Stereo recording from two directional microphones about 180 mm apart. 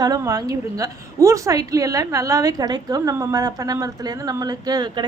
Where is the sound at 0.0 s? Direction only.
20° right (ahead or behind).